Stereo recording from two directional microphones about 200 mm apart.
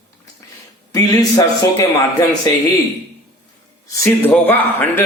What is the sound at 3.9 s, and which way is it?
A man's voice, 15° left (ahead or behind).